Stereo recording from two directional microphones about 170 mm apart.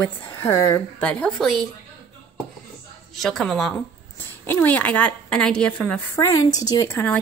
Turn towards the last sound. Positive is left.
turn(degrees=15)  # may be behind; listen again after turning